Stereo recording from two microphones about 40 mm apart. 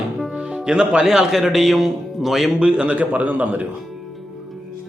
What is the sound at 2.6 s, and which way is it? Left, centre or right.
Speech, right.